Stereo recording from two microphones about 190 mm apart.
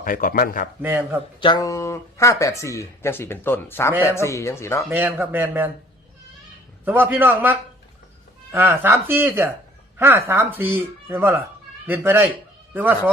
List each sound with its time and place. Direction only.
0.0 s speech: 45° left (ahead or behind)
0.8 s speech: 10° right (ahead or behind)
1.4 s speech: 20° left (ahead or behind)
4.9 s speech: 10° right (ahead or behind)
6.8 s speech: 10° right (ahead or behind)